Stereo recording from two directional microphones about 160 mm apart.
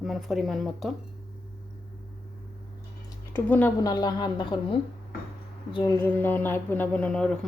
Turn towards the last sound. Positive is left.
turn(degrees=5)  # may be behind; listen again after turning